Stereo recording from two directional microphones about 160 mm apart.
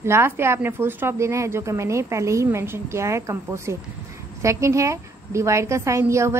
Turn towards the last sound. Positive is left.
turn(degrees=-15)  # may be behind; listen again after turning